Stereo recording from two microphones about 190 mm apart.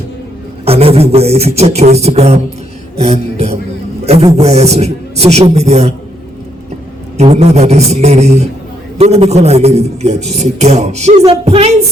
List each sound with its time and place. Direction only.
0.6 s a man's voice: 30° right (ahead or behind)
7.2 s a man's voice: 35° right (ahead or behind)